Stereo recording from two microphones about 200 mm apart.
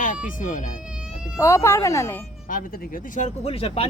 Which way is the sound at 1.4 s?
15° left (ahead or behind).